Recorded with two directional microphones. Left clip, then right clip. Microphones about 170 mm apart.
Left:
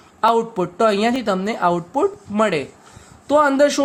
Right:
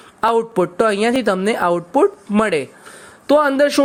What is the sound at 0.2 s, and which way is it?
Speech, 35° right (ahead or behind).